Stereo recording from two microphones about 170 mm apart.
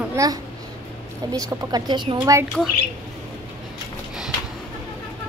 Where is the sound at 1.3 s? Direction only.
25° right (ahead or behind).